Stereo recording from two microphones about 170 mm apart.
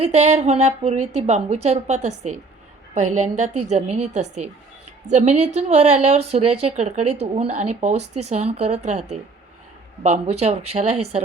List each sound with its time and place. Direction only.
0.0 s a woman's voice: 40° right (ahead or behind)